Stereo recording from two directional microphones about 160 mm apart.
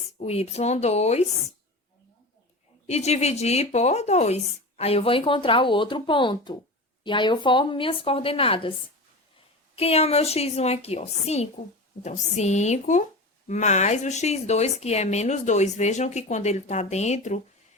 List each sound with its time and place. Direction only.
0.2 s speech: 40° left (ahead or behind)
2.8 s speech: 40° left (ahead or behind)
9.7 s speech: 40° left (ahead or behind)